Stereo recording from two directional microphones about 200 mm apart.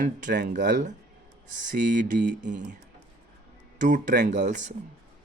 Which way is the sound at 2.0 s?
40° right (ahead or behind).